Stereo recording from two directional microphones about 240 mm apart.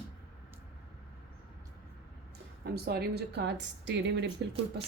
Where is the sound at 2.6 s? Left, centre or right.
Right.